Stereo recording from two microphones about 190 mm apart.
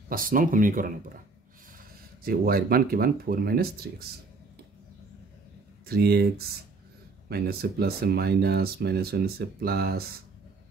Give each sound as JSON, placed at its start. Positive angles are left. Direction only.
{"t": 0.1, "sound": "speech", "side_deg": -45}
{"t": 2.2, "sound": "speech", "side_deg": -50}
{"t": 5.9, "sound": "speech", "side_deg": -55}